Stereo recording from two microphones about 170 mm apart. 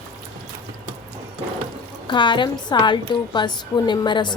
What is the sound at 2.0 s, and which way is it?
A woman's voice, 25° left (ahead or behind).